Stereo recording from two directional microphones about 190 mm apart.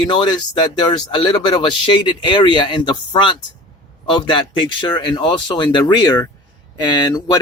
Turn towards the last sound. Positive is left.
turn(degrees=25)  # may be behind; listen again after turning